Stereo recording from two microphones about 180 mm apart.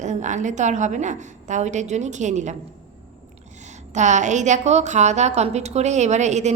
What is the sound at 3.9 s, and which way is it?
A woman's voice, 40° right (ahead or behind).